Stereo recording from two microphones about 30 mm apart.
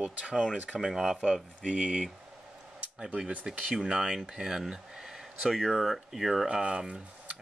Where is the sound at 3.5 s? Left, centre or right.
Right.